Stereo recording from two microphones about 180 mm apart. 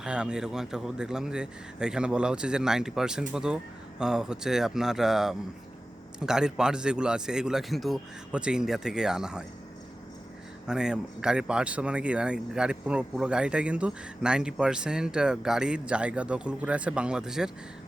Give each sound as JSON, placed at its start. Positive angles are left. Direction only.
{"t": 0.0, "sound": "speech", "side_deg": -5}
{"t": 10.7, "sound": "speech", "side_deg": -5}